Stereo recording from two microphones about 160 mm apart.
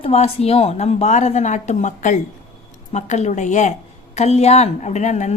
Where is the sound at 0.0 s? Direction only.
40° left (ahead or behind).